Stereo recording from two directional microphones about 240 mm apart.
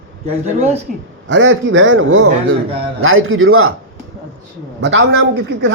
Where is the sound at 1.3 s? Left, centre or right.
Right.